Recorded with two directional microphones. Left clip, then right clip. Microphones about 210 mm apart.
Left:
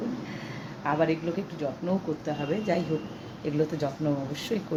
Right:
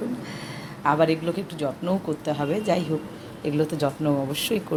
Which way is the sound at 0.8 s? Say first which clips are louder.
Right 5 dB; 20° right (ahead or behind).